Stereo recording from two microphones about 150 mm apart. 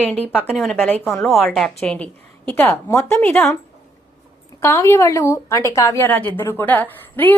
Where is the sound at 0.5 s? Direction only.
5° left (ahead or behind).